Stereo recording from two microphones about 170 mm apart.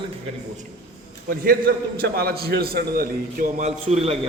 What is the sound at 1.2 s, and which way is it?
A man's voice, 55° right (ahead or behind).